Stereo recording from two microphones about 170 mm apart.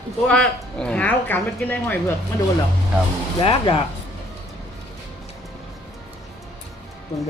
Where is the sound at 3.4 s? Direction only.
30° left (ahead or behind).